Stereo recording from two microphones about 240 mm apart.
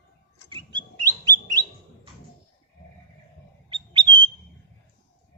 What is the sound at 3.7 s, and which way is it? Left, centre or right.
Bird, centre.